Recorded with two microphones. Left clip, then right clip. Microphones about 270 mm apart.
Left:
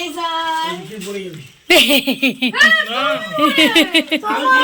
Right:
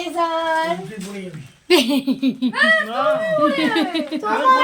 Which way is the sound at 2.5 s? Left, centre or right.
Right.